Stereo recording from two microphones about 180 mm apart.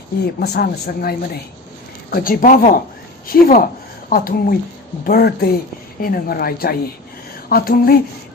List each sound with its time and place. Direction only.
0.3 s a woman's voice: 60° left (ahead or behind)